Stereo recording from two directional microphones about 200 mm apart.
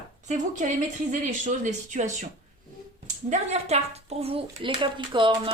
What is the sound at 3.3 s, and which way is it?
A woman's voice, 30° right (ahead or behind).